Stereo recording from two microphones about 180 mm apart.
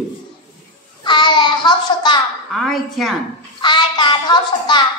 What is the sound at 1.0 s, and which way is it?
Child singing, 25° left (ahead or behind).